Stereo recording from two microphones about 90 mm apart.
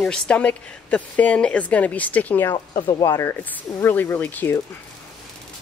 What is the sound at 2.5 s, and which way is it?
Speech, 70° left (ahead or behind).